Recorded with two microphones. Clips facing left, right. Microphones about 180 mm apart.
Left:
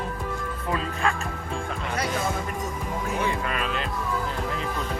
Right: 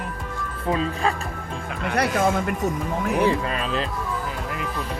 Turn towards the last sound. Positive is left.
turn(degrees=-30)  # may be behind; listen again after turning